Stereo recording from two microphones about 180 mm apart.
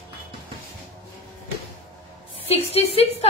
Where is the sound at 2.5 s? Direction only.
35° left (ahead or behind).